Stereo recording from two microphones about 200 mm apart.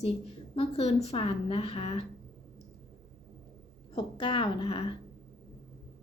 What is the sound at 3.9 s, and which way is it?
A woman's voice, 25° left (ahead or behind).